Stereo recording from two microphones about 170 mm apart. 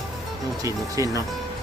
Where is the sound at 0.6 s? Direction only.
20° right (ahead or behind).